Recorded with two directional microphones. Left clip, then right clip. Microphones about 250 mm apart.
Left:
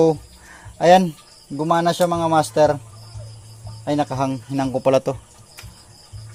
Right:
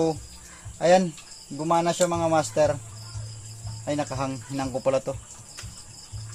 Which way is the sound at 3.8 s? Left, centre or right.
Left.